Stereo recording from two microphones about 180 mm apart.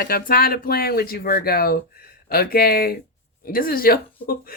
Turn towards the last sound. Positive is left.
turn(degrees=55)  # may be behind; listen again after turning